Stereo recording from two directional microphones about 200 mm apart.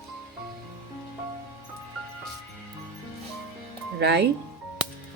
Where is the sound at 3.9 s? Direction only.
55° right (ahead or behind).